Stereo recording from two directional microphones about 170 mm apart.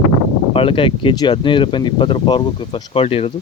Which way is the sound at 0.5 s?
30° left (ahead or behind).